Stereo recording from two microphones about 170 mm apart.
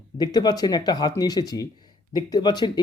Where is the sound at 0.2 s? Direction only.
25° left (ahead or behind).